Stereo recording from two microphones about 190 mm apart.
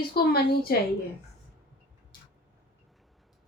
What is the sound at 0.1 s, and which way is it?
Speech, 55° left (ahead or behind).